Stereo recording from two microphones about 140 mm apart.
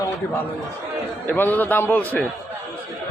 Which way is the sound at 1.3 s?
15° left (ahead or behind).